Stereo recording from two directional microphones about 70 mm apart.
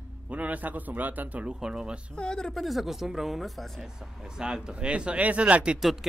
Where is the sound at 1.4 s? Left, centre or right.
Centre.